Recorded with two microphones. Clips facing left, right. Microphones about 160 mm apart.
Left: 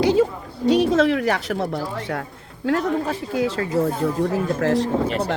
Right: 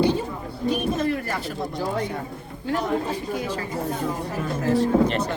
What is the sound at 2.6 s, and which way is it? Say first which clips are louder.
Speech: left 4 dB; 90° left.